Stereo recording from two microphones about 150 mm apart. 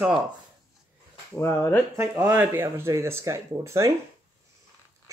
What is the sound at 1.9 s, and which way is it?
Speech, 20° right (ahead or behind).